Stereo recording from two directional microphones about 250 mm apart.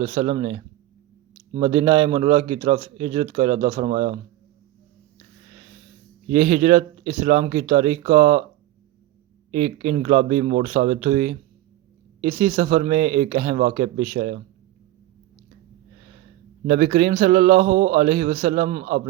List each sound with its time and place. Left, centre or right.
0.0 s a man's voice: right
6.3 s a man's voice: right
9.5 s a man's voice: right
16.6 s a man's voice: right